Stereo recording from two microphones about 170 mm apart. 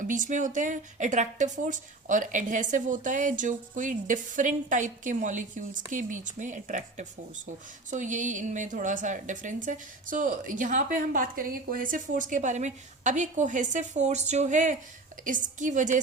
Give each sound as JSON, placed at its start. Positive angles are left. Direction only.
{"t": 0.0, "sound": "a woman's voice", "side_deg": -50}